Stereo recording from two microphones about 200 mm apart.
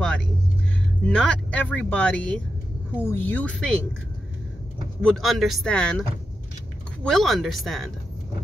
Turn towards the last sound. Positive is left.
turn(degrees=0)  # may be behind; listen again after turning